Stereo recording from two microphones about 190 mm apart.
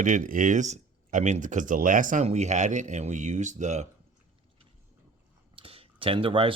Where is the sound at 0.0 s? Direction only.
45° right (ahead or behind).